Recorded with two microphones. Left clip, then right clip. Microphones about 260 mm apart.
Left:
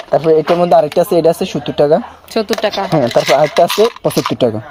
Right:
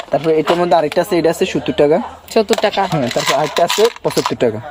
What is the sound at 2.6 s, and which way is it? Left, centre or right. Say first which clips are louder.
Speech: left 1 dB; centre.